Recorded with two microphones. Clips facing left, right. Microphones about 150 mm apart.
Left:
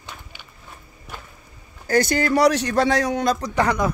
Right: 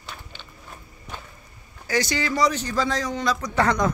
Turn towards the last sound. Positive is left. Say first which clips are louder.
# left 1 dB
turn(degrees=10)  # may be behind; listen again after turning